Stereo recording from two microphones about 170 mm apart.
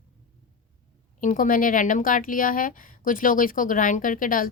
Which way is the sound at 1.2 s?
50° left (ahead or behind).